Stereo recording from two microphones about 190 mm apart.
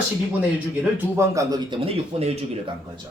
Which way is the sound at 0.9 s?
15° right (ahead or behind).